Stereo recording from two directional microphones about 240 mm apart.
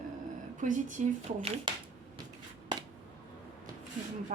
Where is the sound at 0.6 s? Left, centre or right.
Right.